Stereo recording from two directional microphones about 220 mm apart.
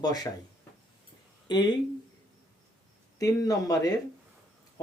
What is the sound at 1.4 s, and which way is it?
Speech, 20° left (ahead or behind).